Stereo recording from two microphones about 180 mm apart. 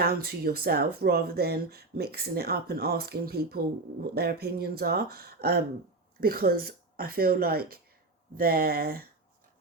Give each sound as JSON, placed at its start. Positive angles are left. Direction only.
{"t": 0.0, "sound": "speech", "side_deg": -55}